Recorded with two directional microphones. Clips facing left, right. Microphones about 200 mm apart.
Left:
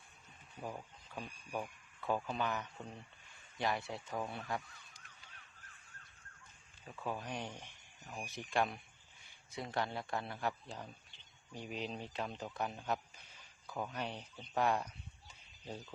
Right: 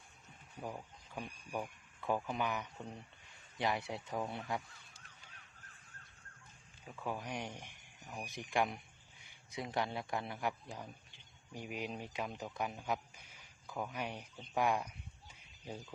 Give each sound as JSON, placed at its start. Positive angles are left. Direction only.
{"t": 0.6, "sound": "speech", "side_deg": -5}
{"t": 6.8, "sound": "a man's voice", "side_deg": -10}